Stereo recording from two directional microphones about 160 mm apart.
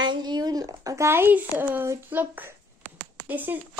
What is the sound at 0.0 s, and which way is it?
Speech, 25° right (ahead or behind).